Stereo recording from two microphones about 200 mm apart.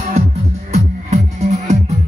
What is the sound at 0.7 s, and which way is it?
Music, 35° right (ahead or behind).